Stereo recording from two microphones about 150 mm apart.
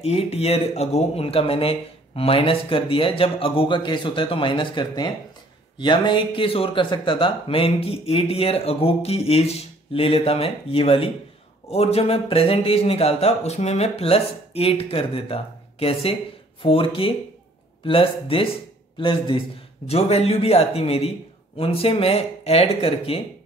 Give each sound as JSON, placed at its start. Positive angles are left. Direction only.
{"t": 0.0, "sound": "speech", "side_deg": 45}